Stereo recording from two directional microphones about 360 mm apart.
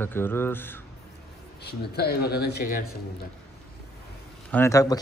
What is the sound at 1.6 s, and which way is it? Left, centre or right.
Speech, left.